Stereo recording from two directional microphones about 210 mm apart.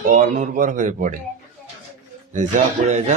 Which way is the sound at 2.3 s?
35° right (ahead or behind).